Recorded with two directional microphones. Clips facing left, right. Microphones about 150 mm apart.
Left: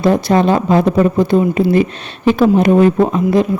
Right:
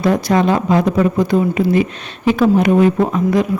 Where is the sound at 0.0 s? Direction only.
30° left (ahead or behind).